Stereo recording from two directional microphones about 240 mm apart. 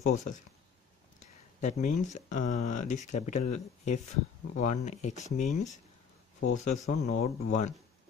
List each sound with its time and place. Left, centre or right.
0.0 s speech: left